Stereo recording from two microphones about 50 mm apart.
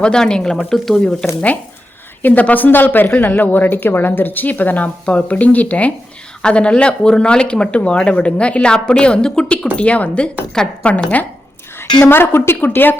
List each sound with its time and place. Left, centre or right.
0.0 s speech: centre
2.2 s a woman's voice: left
6.4 s speech: left
9.7 s a woman's voice: left
12.0 s a woman's voice: left
12.5 s a woman's voice: left